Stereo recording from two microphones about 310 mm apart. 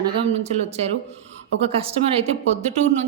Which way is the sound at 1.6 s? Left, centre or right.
Centre.